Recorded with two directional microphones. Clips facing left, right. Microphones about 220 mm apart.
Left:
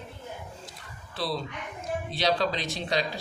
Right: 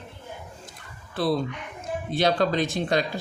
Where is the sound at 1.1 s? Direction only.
50° right (ahead or behind).